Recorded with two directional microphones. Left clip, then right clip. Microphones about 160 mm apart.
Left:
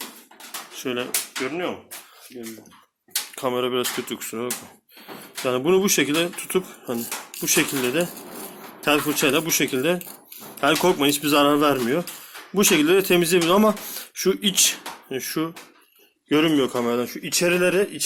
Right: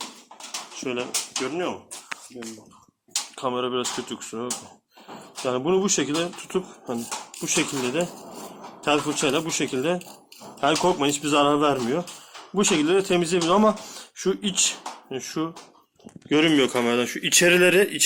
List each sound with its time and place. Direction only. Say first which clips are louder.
0.8 s speech: left 2 dB; 60° left (ahead or behind)
1.5 s speech: left 1 dB; 45° left (ahead or behind)
3.3 s speech: left 3 dB; 45° left (ahead or behind)
16.3 s speech: even; 20° left (ahead or behind)